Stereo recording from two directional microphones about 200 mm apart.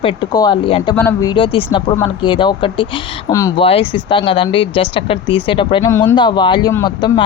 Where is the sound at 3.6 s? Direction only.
30° left (ahead or behind).